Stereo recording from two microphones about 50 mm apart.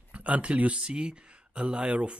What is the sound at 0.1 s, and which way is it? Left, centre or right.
Speech, right.